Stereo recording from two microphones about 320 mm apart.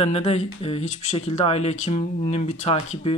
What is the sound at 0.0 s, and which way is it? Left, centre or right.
Speech, centre.